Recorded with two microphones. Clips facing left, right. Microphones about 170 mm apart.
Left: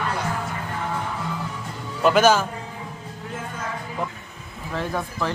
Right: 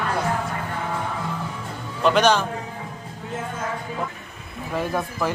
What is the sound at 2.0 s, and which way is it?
Speech, 5° left (ahead or behind).